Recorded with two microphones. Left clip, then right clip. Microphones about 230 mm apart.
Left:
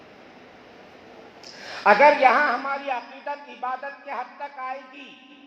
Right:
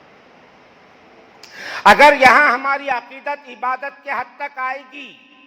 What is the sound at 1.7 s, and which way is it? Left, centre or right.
A man's voice, right.